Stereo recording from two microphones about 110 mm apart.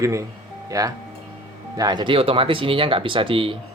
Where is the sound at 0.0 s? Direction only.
30° right (ahead or behind).